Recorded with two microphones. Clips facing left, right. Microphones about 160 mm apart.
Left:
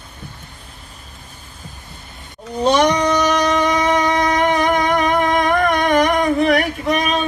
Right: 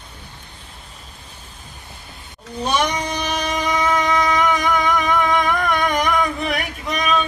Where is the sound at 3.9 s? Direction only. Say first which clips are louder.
Left 2 dB; 50° left (ahead or behind).